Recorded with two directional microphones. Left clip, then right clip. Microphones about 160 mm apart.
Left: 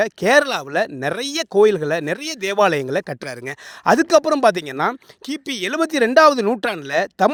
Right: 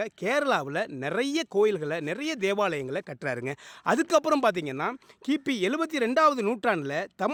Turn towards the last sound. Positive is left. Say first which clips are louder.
# left 11 dB
turn(degrees=45)  # may be behind; listen again after turning